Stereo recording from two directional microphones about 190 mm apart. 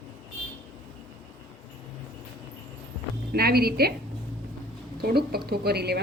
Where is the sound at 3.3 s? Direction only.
55° right (ahead or behind).